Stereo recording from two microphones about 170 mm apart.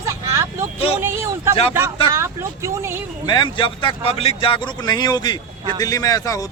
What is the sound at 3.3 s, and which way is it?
Speech, 30° left (ahead or behind).